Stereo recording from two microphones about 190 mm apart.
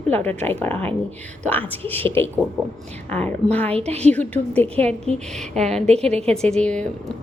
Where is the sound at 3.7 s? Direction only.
35° right (ahead or behind).